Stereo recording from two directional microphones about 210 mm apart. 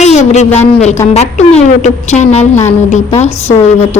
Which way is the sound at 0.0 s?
30° left (ahead or behind).